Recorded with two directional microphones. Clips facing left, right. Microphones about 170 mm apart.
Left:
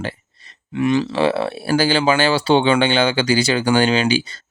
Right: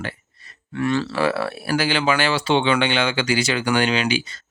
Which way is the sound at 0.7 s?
15° left (ahead or behind).